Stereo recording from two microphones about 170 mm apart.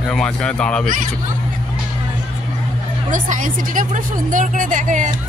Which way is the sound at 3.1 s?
50° right (ahead or behind).